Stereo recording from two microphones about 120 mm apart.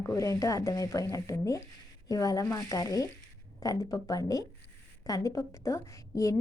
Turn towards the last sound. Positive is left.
turn(degrees=25)  # may be behind; listen again after turning